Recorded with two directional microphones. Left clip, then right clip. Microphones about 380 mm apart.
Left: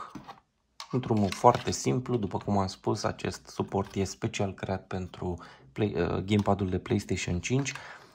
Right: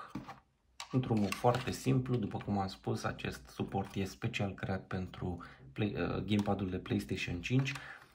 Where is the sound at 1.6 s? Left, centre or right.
Centre.